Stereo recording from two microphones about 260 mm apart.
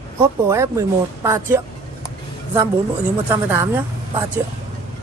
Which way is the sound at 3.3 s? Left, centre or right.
Centre.